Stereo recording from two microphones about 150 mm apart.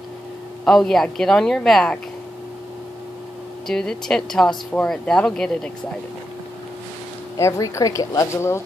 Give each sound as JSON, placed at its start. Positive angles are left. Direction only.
{"t": 0.7, "sound": "speech", "side_deg": 5}
{"t": 3.6, "sound": "speech", "side_deg": 5}
{"t": 7.3, "sound": "speech", "side_deg": 20}